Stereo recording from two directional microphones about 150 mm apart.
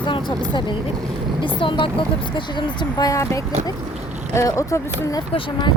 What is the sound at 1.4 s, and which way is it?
Speech, 35° left (ahead or behind).